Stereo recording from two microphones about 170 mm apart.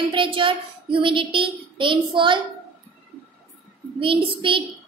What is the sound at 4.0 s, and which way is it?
Speech, 30° right (ahead or behind).